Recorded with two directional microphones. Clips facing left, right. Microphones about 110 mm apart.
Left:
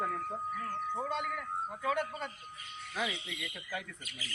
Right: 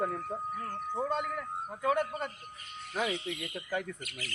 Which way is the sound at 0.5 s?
40° right (ahead or behind).